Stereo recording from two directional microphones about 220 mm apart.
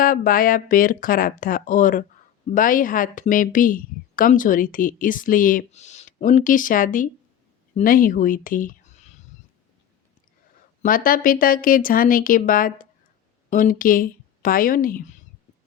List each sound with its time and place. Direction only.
0.0 s a woman's voice: 40° left (ahead or behind)
10.8 s a woman's voice: 40° left (ahead or behind)